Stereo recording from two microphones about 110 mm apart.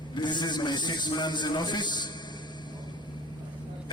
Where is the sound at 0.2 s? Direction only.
45° left (ahead or behind).